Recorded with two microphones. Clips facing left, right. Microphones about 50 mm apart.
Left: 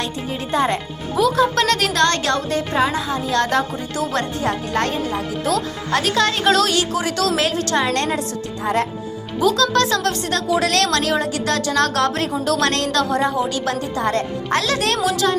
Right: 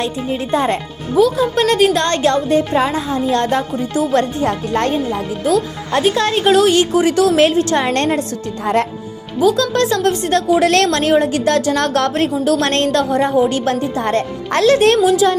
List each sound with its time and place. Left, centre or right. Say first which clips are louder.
1.2 s a woman's voice: right 3 dB; centre
7.9 s a woman's voice: right 4 dB; right
9.6 s a woman's voice: right 2 dB; right
14.9 s speech: right 7 dB; centre